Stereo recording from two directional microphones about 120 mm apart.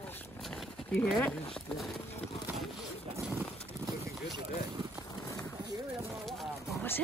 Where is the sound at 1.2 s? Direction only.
5° left (ahead or behind).